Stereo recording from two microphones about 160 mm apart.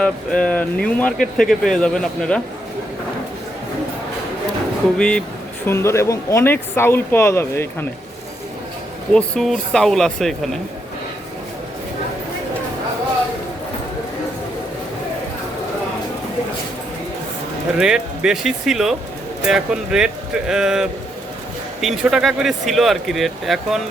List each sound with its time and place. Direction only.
0.0 s speech: 5° left (ahead or behind)
4.9 s speech: 5° left (ahead or behind)
5.6 s speech: 15° left (ahead or behind)
9.1 s speech: 5° left (ahead or behind)
17.7 s speech: 5° right (ahead or behind)